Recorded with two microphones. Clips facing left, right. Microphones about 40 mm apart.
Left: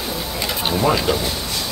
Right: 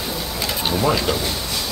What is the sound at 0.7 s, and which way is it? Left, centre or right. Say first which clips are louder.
Speech: left 2 dB; centre.